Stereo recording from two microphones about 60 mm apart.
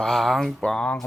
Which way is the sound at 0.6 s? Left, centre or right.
Centre.